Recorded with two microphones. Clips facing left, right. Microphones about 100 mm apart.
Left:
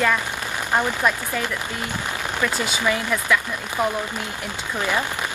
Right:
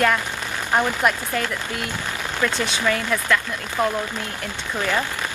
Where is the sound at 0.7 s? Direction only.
15° right (ahead or behind).